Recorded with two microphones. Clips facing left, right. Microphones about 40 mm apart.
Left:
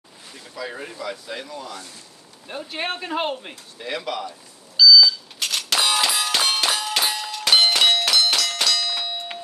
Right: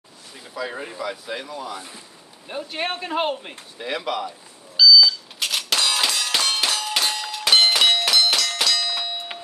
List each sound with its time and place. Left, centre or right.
0.3 s speech: centre
1.8 s speech: right
2.4 s speech: centre
3.7 s a sound: centre
6.9 s clang: centre
7.2 s a sound: centre